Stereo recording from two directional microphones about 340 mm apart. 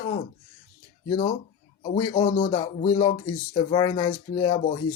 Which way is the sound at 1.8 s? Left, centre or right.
Centre.